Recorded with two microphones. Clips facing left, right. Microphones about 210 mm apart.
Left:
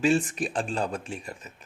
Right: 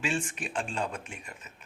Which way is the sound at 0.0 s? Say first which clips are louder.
Left 9 dB; 40° left (ahead or behind).